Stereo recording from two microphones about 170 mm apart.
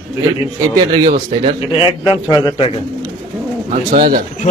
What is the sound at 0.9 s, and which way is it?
Speech, 30° right (ahead or behind).